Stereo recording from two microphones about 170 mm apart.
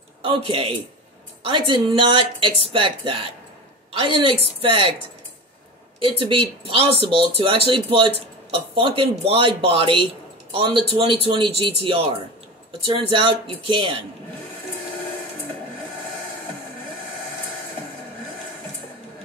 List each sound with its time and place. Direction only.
0.2 s speech: 30° right (ahead or behind)
5.9 s a man's voice: 30° right (ahead or behind)